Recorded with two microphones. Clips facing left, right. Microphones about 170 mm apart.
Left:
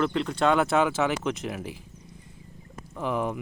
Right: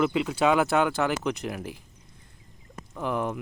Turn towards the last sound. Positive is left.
turn(degrees=0)  # may be behind; listen again after turning